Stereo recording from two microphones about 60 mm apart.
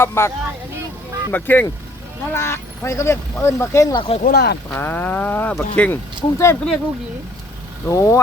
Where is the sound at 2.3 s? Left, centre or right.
Left.